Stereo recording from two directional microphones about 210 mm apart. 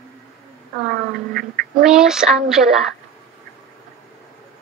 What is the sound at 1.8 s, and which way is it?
A woman's voice, 5° right (ahead or behind).